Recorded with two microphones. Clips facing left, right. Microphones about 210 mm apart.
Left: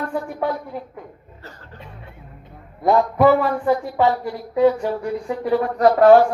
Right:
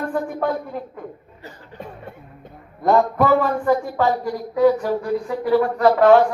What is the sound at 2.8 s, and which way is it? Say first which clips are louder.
Speech: left 2 dB; 10° left (ahead or behind).